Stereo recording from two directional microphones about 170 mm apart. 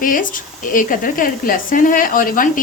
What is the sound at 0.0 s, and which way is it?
Speech, 55° left (ahead or behind).